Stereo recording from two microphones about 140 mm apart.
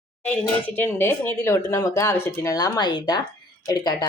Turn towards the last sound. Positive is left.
turn(degrees=30)  # may be behind; listen again after turning